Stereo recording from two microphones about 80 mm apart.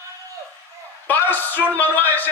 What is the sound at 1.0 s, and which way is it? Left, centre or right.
A man's voice, left.